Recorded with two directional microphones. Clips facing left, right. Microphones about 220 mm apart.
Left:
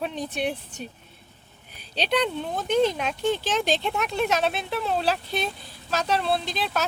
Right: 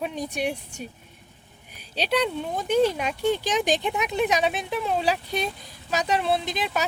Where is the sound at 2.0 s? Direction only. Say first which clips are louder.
Even; 5° right (ahead or behind).